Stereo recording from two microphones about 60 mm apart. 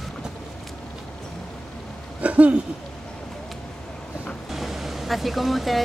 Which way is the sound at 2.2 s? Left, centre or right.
Right.